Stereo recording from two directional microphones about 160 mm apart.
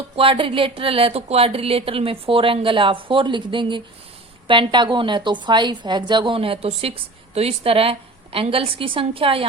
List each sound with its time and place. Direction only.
0.2 s a woman's voice: 35° right (ahead or behind)